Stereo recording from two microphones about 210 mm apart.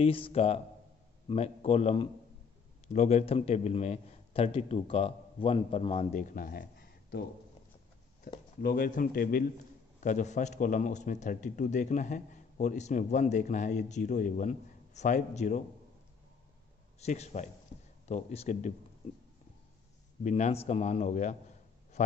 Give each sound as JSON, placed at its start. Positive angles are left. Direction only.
{"t": 0.0, "sound": "a man's voice", "side_deg": 25}
{"t": 6.3, "sound": "a sound", "side_deg": 40}
{"t": 8.3, "sound": "a man's voice", "side_deg": 45}
{"t": 17.0, "sound": "a man's voice", "side_deg": 35}
{"t": 17.7, "sound": "a sound", "side_deg": 30}
{"t": 18.0, "sound": "a man's voice", "side_deg": 30}
{"t": 20.2, "sound": "a man's voice", "side_deg": 35}